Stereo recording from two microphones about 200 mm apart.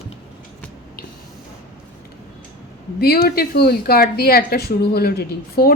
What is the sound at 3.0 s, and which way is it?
Speech, 50° left (ahead or behind).